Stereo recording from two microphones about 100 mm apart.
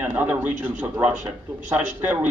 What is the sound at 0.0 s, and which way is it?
A man's voice, 20° right (ahead or behind).